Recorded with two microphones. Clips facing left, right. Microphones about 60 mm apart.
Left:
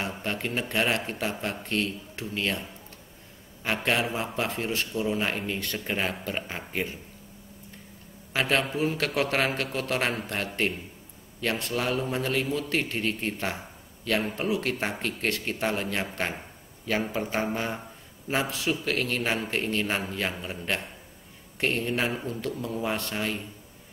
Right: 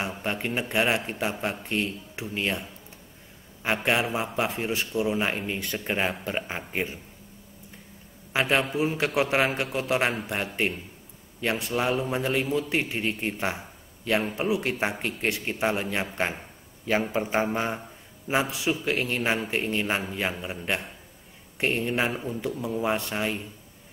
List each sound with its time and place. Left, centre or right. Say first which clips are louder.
0.0 s a man's voice: right 1 dB; centre
3.6 s a man's voice: right 2 dB; centre
8.3 s a man's voice: right 2 dB; centre